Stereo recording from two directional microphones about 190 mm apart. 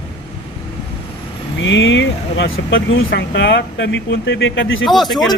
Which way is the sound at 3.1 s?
65° left (ahead or behind).